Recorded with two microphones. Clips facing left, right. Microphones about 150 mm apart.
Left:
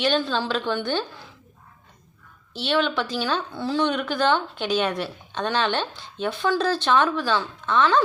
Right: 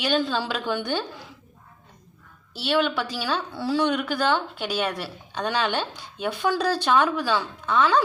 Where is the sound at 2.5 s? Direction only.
5° right (ahead or behind).